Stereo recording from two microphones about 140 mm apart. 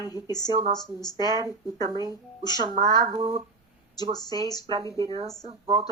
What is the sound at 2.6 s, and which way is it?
Speech, 30° right (ahead or behind).